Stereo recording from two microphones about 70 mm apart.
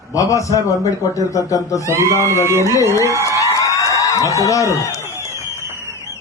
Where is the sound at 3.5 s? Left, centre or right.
Left.